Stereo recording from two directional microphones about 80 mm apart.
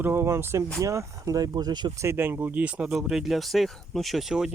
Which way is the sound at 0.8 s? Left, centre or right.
Right.